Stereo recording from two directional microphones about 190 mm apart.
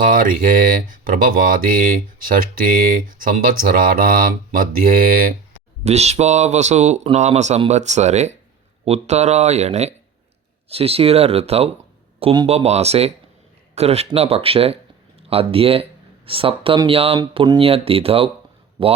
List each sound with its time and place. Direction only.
0.0 s speech: 45° right (ahead or behind)
3.1 s speech: 45° right (ahead or behind)
5.8 s speech: 35° right (ahead or behind)